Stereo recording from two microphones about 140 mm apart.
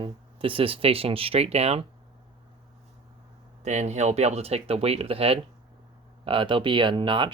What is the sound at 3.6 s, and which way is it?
Speech, 55° right (ahead or behind).